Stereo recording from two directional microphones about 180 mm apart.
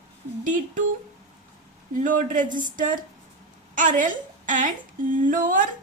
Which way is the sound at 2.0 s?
45° right (ahead or behind).